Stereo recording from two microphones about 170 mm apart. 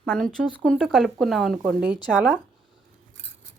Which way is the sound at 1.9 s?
25° left (ahead or behind).